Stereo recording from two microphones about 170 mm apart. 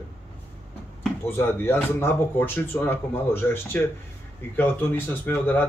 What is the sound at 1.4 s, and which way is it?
A man's voice, 10° left (ahead or behind).